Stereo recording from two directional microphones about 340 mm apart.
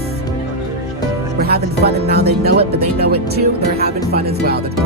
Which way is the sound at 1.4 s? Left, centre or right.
Right.